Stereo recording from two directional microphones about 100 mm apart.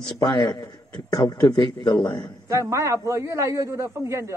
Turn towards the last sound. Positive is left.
turn(degrees=-30)  # may be behind; listen again after turning